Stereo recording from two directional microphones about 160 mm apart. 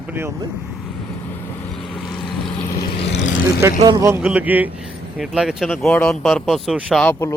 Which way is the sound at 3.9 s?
20° right (ahead or behind).